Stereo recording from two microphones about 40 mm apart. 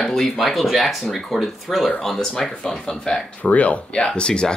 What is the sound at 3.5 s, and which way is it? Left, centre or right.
Speech, left.